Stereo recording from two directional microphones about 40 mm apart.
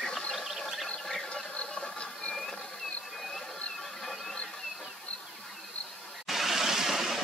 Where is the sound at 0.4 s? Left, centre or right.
Centre.